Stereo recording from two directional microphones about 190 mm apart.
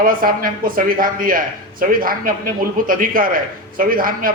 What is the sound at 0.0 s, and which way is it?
A man's voice, 45° right (ahead or behind).